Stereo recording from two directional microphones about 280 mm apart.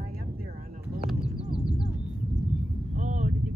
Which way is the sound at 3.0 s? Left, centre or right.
Right.